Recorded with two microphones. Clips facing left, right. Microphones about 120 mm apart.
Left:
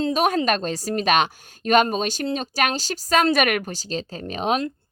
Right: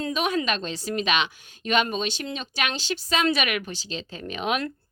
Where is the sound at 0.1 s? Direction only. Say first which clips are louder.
Left 5 dB; 40° left (ahead or behind).